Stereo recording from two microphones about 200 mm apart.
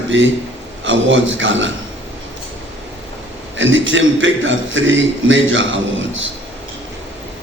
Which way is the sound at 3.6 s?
70° right (ahead or behind).